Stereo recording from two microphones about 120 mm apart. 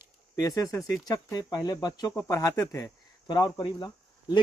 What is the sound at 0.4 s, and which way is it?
Speech, 30° left (ahead or behind).